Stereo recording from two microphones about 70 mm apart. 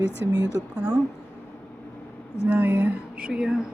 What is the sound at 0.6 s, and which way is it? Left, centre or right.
Speech, right.